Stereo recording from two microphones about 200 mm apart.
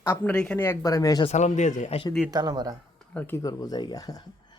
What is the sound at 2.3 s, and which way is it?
Speech, 20° right (ahead or behind).